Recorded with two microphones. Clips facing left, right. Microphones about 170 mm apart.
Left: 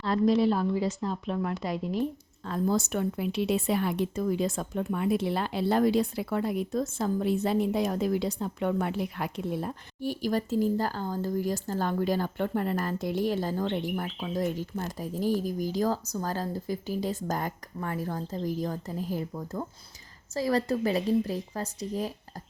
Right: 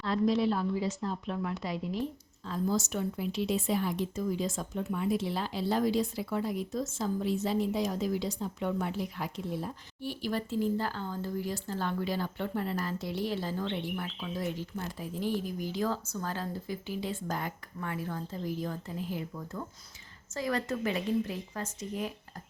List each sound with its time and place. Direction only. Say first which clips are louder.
1.0 s speech: left 3 dB; 5° left (ahead or behind)
1.6 s speech: left 4 dB; 50° left (ahead or behind)
10.0 s speech: left 5 dB; 45° left (ahead or behind)